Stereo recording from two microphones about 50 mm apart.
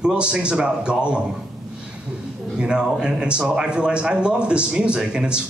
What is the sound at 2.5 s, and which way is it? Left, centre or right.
Speech, centre.